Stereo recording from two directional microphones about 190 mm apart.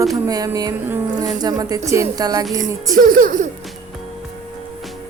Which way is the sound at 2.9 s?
45° right (ahead or behind).